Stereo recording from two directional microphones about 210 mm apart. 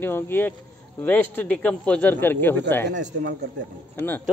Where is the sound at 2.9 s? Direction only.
55° right (ahead or behind).